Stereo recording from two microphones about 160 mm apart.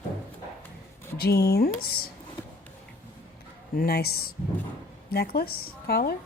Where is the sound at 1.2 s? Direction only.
80° left.